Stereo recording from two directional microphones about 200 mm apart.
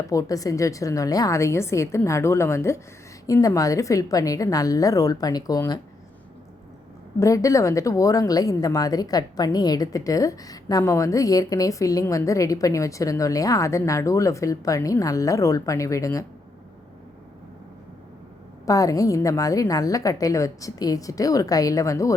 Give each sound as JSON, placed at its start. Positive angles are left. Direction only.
{"t": 0.0, "sound": "a woman's voice", "side_deg": 15}
{"t": 7.2, "sound": "a woman's voice", "side_deg": 15}
{"t": 18.6, "sound": "a woman's voice", "side_deg": 15}